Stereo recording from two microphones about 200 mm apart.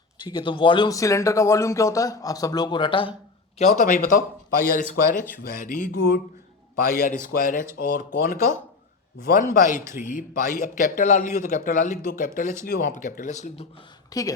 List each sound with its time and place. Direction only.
0.2 s speech: 25° left (ahead or behind)
3.6 s speech: 40° left (ahead or behind)
7.0 s speech: 40° left (ahead or behind)
14.1 s speech: 15° left (ahead or behind)